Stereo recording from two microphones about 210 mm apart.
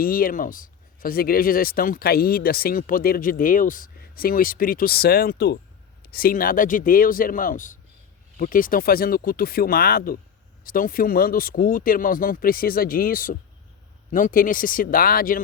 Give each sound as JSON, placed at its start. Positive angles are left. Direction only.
{"t": 0.0, "sound": "speech", "side_deg": 45}